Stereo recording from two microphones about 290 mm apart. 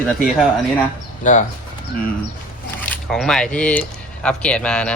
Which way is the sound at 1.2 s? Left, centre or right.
Left.